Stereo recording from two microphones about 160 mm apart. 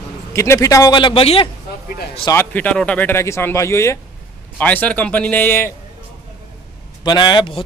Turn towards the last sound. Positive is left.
turn(degrees=30)  # may be behind; listen again after turning